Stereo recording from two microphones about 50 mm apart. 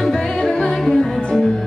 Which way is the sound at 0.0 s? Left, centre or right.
Centre.